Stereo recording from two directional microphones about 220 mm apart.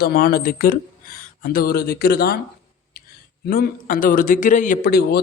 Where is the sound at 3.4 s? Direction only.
45° left (ahead or behind).